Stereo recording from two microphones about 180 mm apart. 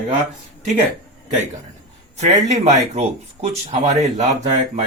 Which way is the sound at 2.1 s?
40° right (ahead or behind).